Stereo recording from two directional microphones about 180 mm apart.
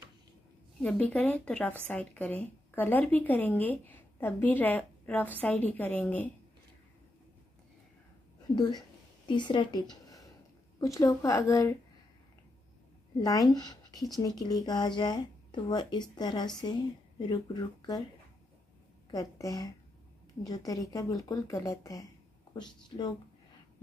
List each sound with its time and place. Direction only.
0.7 s speech: 5° left (ahead or behind)
8.5 s a woman's voice: 25° left (ahead or behind)
13.2 s speech: 20° left (ahead or behind)
19.0 s speech: 20° left (ahead or behind)